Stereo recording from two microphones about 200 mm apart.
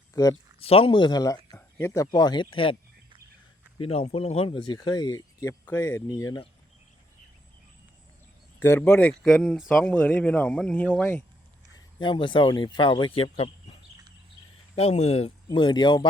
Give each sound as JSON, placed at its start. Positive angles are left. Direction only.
{"t": 0.1, "sound": "speech", "side_deg": 20}
{"t": 0.6, "sound": "speech", "side_deg": 30}
{"t": 3.8, "sound": "speech", "side_deg": 30}
{"t": 8.5, "sound": "speech", "side_deg": 10}
{"t": 11.9, "sound": "speech", "side_deg": 25}
{"t": 14.8, "sound": "speech", "side_deg": 30}